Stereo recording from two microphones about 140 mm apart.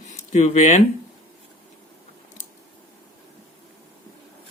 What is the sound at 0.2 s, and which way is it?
Speech, 55° left (ahead or behind).